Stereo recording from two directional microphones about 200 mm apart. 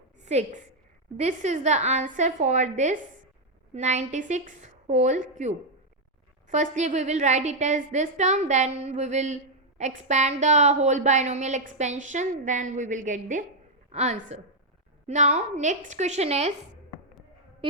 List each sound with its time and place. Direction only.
0.3 s a woman's voice: 35° right (ahead or behind)
17.6 s music: 25° right (ahead or behind)